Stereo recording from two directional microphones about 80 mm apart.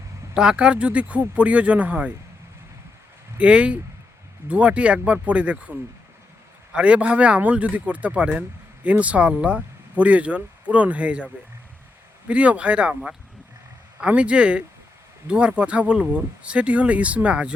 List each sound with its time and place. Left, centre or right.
0.3 s speech: centre
3.3 s speech: centre
6.7 s speech: centre
12.3 s speech: centre
14.0 s speech: centre